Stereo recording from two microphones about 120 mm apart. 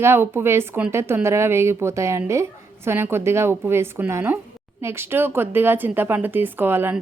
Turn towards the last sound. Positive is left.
turn(degrees=-20)  # may be behind; listen again after turning